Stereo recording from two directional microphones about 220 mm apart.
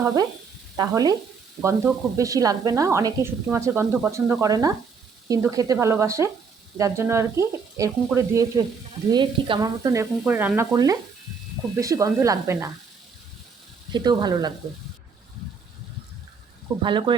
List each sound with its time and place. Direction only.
0.0 s speech: 15° right (ahead or behind)
13.9 s speech: 20° right (ahead or behind)
16.8 s speech: 20° right (ahead or behind)